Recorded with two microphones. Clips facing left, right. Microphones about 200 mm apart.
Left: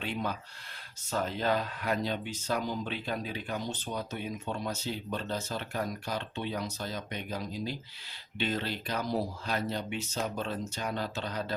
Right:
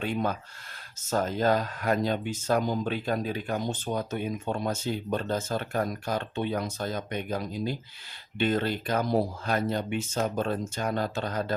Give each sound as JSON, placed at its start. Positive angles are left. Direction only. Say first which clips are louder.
{"t": 0.0, "sound": "speech", "louder": "right 5 dB", "side_deg": -50}